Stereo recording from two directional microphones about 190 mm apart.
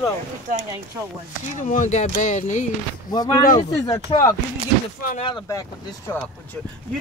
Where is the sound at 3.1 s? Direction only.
20° left (ahead or behind).